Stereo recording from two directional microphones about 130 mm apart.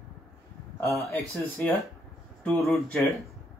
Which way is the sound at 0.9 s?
Centre (ahead or behind).